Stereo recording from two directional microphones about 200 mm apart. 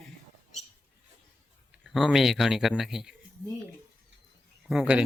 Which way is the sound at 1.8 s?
Centre (ahead or behind).